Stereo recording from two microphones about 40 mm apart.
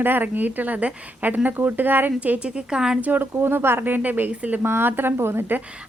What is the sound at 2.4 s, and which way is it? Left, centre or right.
Speech, right.